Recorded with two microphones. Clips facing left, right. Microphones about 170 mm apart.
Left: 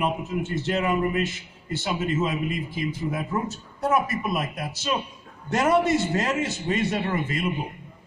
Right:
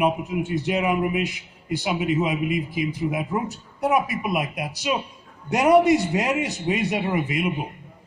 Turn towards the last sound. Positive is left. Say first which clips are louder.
# right 3 dB
turn(degrees=-15)  # may be behind; listen again after turning